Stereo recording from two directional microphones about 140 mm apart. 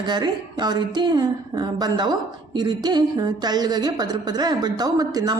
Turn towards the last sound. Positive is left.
turn(degrees=-25)  # may be behind; listen again after turning